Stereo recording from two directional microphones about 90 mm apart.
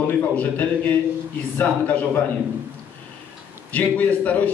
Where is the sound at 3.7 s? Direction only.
15° left (ahead or behind).